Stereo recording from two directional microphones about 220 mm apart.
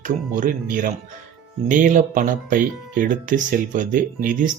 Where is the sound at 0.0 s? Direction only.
35° right (ahead or behind).